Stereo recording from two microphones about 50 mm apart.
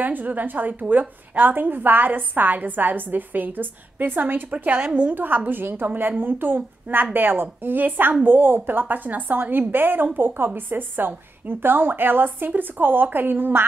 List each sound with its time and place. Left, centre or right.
0.0 s a woman's voice: right